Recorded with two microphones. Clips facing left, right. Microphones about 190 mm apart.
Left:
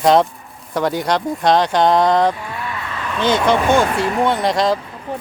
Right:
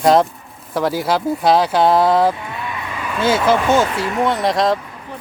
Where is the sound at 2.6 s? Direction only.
20° right (ahead or behind).